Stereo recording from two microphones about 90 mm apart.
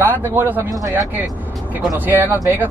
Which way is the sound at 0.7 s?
40° right (ahead or behind).